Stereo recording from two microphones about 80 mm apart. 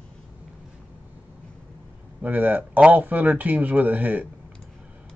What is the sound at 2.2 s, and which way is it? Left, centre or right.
Speech, centre.